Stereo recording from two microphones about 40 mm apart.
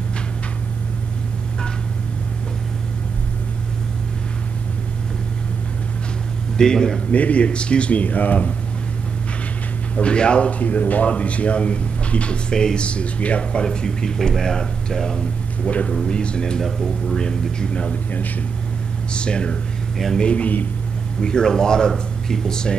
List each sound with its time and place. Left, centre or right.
6.5 s speech: centre
7.1 s speech: left
9.9 s speech: left
10.6 s speech: left
12.8 s speech: left
13.4 s speech: left
13.7 s speech: centre
19.1 s speech: left